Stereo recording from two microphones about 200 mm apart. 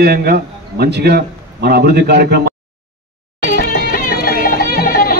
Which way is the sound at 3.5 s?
45° left (ahead or behind).